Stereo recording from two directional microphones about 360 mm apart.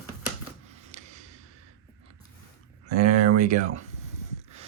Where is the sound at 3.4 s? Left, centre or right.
Centre.